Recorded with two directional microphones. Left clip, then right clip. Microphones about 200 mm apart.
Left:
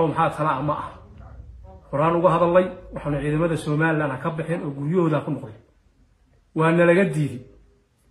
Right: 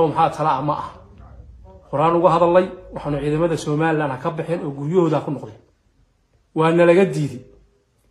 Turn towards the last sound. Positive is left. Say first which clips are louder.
# right 4 dB
turn(degrees=-40)  # may be behind; listen again after turning